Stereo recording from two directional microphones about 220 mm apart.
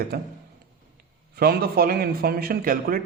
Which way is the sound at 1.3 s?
45° right (ahead or behind).